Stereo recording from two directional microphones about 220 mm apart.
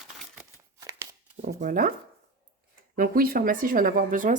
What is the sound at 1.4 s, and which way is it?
Speech, 35° right (ahead or behind).